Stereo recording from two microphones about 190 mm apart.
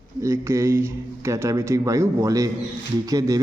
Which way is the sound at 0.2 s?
15° right (ahead or behind).